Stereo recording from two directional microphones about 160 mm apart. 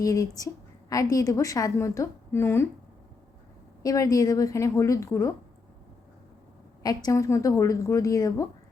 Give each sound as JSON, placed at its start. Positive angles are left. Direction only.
{"t": 0.0, "sound": "a woman's voice", "side_deg": 20}
{"t": 3.8, "sound": "a woman's voice", "side_deg": 20}
{"t": 6.8, "sound": "a woman's voice", "side_deg": 20}